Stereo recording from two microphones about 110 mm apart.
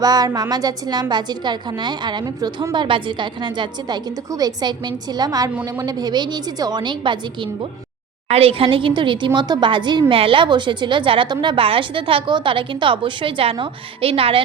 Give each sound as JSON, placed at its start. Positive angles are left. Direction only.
{"t": 0.0, "sound": "a woman's voice", "side_deg": -35}
{"t": 8.3, "sound": "a woman's voice", "side_deg": -60}
{"t": 11.6, "sound": "a woman's voice", "side_deg": -55}